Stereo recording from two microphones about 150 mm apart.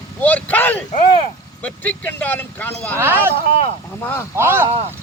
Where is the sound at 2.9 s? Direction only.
15° right (ahead or behind).